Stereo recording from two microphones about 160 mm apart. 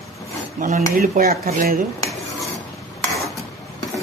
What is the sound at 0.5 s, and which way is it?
Speech, 55° right (ahead or behind).